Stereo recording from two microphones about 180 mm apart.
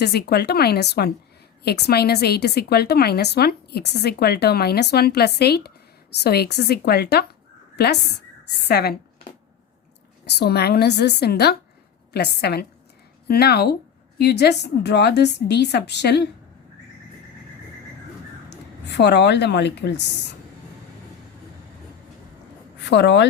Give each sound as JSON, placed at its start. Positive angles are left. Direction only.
{"t": 0.0, "sound": "speech", "side_deg": 60}
{"t": 10.2, "sound": "a woman's voice", "side_deg": 65}
{"t": 18.5, "sound": "a woman's voice", "side_deg": 70}
{"t": 22.8, "sound": "a woman's voice", "side_deg": 75}